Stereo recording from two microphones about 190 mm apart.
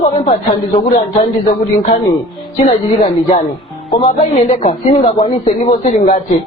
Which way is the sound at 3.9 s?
30° left (ahead or behind).